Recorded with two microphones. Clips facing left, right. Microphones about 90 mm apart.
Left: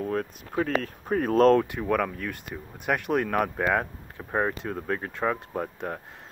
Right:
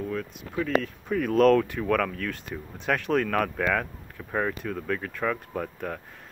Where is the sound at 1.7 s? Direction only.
20° left (ahead or behind).